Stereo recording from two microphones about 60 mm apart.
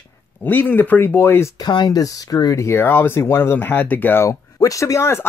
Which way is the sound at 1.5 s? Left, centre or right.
Left.